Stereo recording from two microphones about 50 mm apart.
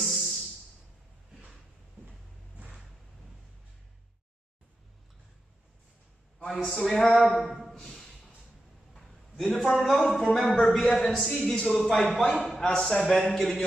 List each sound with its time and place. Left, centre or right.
0.0 s music: centre
6.4 s a man's voice: centre
7.3 s a sound: centre
9.8 s a man's voice: centre
12.8 s speech: centre